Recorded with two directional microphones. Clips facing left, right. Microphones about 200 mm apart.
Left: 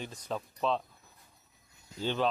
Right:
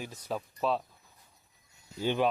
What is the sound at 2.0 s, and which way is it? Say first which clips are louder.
Speech: right 2 dB; 15° right (ahead or behind).